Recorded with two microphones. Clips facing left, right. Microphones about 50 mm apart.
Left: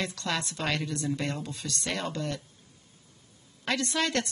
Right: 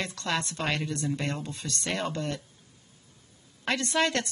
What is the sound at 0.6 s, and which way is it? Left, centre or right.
Speech, centre.